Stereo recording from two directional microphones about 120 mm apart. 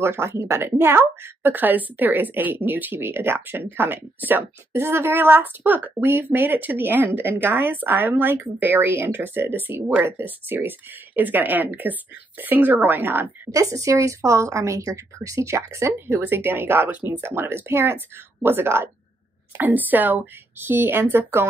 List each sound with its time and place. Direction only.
0.0 s a woman's voice: 20° right (ahead or behind)